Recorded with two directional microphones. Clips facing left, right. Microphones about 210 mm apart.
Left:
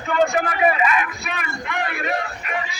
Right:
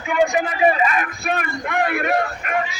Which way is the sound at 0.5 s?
30° right (ahead or behind).